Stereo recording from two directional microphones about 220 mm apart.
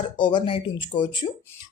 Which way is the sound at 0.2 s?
20° left (ahead or behind).